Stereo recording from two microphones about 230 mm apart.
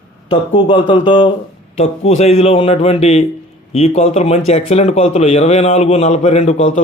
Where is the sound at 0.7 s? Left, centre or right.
Centre.